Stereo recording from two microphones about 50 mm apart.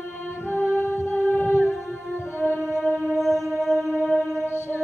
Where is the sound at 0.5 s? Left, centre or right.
Left.